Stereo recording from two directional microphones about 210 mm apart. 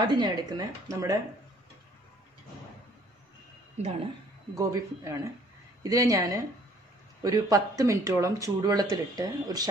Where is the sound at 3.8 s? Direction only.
30° right (ahead or behind).